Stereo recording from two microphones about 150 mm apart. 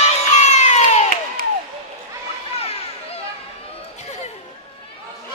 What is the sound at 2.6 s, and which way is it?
Children playing, 40° left (ahead or behind).